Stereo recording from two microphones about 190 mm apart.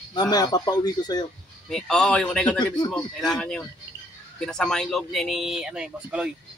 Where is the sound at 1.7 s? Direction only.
5° left (ahead or behind).